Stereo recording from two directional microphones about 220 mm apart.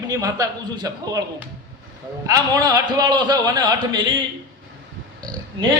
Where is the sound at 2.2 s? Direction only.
15° right (ahead or behind).